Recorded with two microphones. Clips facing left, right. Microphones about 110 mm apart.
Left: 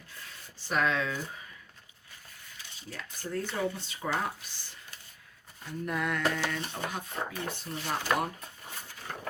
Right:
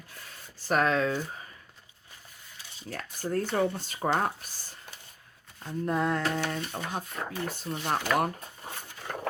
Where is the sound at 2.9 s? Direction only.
45° right (ahead or behind).